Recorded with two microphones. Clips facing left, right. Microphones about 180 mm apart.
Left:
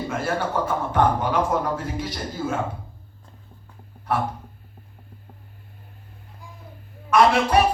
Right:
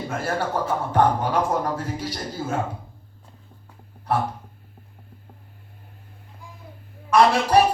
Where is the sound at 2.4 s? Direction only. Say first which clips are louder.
Left 2 dB; 35° right (ahead or behind).